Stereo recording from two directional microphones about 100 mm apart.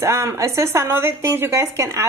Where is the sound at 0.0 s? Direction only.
30° right (ahead or behind).